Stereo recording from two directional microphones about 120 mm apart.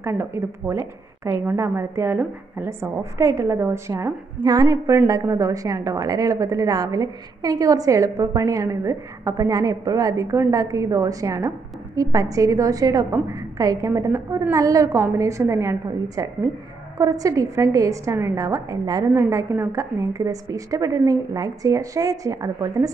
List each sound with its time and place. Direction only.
0.0 s a woman's voice: 20° right (ahead or behind)
4.4 s a woman's voice: 35° right (ahead or behind)
19.1 s a woman's voice: 20° right (ahead or behind)